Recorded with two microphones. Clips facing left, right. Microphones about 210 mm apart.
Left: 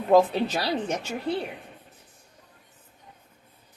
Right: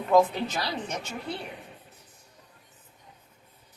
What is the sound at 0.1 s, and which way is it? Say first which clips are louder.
Speech: left 3 dB; 35° left (ahead or behind).